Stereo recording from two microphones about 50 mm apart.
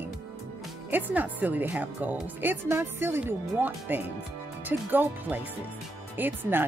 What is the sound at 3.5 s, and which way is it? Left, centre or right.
Speech, right.